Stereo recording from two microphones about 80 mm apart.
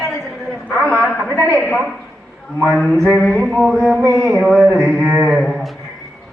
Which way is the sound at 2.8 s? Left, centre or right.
Centre.